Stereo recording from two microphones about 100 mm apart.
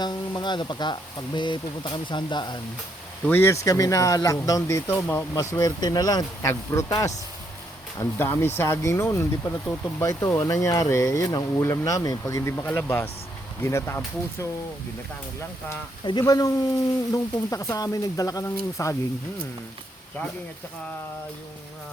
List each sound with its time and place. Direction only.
0.0 s speech: 45° left (ahead or behind)
3.2 s speech: 20° left (ahead or behind)
4.9 s speech: 20° left (ahead or behind)
5.3 s speech: 35° left (ahead or behind)
8.2 s speech: 25° left (ahead or behind)
16.2 s speech: 35° left (ahead or behind)